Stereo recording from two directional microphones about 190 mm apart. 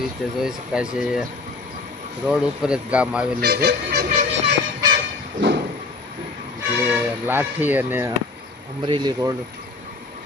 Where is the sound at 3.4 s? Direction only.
55° right (ahead or behind).